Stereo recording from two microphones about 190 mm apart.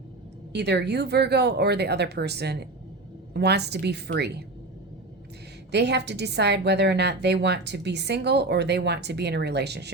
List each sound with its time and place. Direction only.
0.5 s a woman's voice: 60° right (ahead or behind)
5.7 s a woman's voice: 60° right (ahead or behind)